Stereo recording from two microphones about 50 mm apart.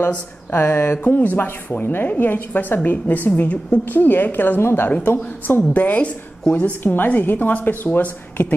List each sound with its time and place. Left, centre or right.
0.5 s a woman's voice: left
1.0 s speech: left
3.8 s a woman's voice: left
5.7 s speech: left